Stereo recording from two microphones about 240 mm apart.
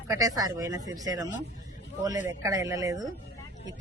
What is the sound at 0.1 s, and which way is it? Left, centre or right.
A man's voice, centre.